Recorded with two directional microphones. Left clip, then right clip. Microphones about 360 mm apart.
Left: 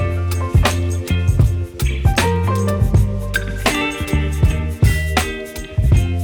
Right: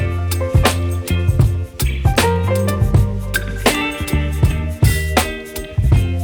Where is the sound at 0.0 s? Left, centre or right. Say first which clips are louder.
Right 1 dB; centre.